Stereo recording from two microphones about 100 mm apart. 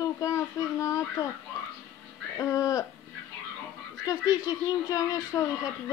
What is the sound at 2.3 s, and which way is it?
Music, 35° left (ahead or behind).